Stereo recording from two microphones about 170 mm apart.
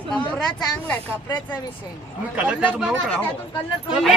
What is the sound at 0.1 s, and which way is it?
Speech, 5° left (ahead or behind).